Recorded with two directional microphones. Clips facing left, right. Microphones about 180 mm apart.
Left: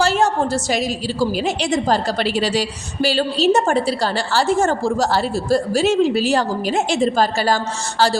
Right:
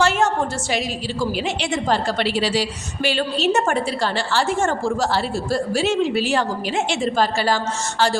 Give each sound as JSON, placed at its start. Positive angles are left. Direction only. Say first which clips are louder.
{"t": 0.0, "sound": "a woman's voice", "louder": "left 2 dB", "side_deg": 35}